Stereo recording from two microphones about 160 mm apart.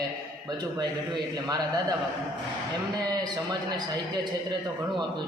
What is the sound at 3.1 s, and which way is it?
Speech, 25° right (ahead or behind).